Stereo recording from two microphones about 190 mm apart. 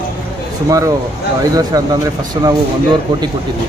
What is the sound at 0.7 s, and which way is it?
Speech, 15° right (ahead or behind).